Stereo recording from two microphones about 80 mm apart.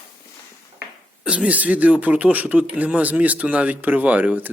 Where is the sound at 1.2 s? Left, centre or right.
Centre.